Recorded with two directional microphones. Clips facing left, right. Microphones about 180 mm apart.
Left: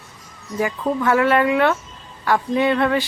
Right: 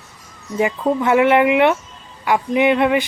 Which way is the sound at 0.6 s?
20° right (ahead or behind).